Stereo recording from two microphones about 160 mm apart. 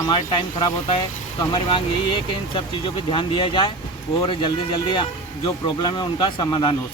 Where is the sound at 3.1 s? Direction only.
30° left (ahead or behind).